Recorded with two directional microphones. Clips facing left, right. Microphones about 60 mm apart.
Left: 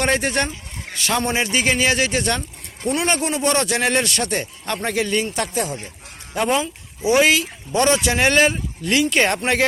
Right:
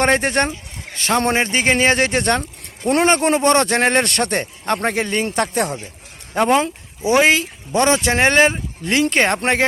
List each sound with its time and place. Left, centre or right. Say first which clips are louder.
0.0 s speech: right 4 dB; right
2.4 s speech: right 2 dB; right
3.4 s speech: right 4 dB; right
5.4 s speech: right 4 dB; right
6.3 s speech: right 4 dB; right